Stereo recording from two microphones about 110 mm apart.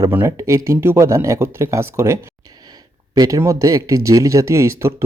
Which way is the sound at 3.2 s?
30° right (ahead or behind).